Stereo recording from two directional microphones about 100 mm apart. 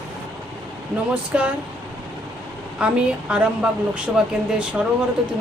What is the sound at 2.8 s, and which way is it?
Speech, 10° right (ahead or behind).